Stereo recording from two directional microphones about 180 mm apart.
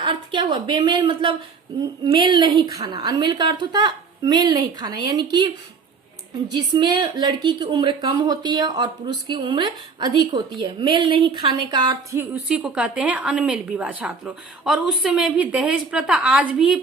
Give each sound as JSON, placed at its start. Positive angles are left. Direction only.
{"t": 0.0, "sound": "a woman's voice", "side_deg": -25}
{"t": 6.5, "sound": "a woman's voice", "side_deg": -25}